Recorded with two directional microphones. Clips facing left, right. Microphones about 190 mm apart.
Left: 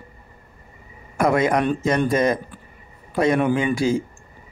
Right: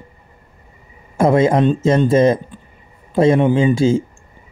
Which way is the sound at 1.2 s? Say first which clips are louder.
Right 5 dB; 25° right (ahead or behind).